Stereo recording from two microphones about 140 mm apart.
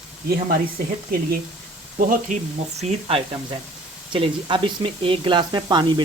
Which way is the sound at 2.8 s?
45° right (ahead or behind).